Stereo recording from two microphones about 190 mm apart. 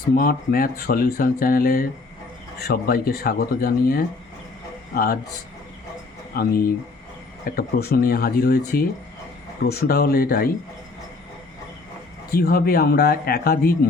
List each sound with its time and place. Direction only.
0.2 s speech: 50° left (ahead or behind)
6.3 s speech: 55° left (ahead or behind)
12.3 s speech: 50° left (ahead or behind)